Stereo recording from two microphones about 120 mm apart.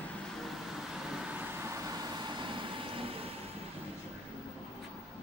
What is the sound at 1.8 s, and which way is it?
Vehicle, 35° right (ahead or behind).